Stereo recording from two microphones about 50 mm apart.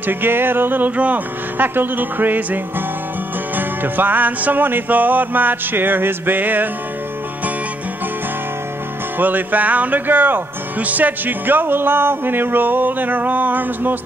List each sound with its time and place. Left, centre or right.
0.0 s music: right
1.6 s speech: right
9.2 s speech: right